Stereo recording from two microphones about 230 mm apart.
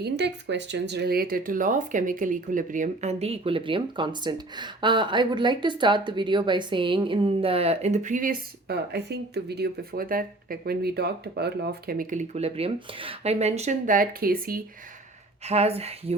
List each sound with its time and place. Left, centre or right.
0.0 s speech: right
15.4 s speech: right